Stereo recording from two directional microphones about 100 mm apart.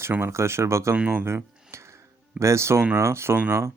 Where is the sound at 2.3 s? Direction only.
30° right (ahead or behind).